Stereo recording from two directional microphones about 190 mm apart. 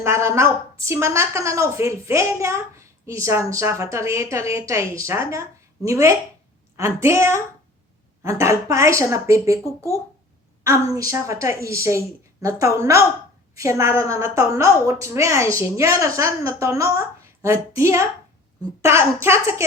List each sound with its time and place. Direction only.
0.0 s a woman's voice: 15° right (ahead or behind)